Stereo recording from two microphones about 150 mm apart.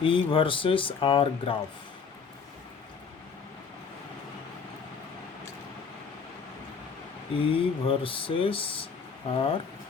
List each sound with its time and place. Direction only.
0.0 s speech: 35° left (ahead or behind)
7.3 s speech: 35° left (ahead or behind)